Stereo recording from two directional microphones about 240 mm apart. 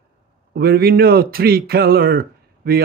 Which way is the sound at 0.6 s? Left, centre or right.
Right.